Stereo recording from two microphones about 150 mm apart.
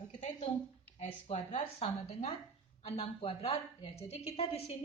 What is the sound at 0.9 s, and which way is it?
Speech, 45° left (ahead or behind).